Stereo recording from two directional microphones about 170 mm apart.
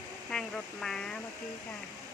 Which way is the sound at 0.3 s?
5° left (ahead or behind).